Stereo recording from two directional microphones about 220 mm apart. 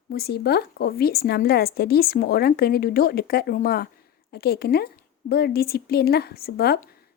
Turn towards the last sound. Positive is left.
turn(degrees=45)  # may be behind; listen again after turning